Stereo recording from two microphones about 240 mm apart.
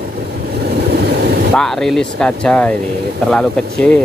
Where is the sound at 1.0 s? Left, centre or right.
Right.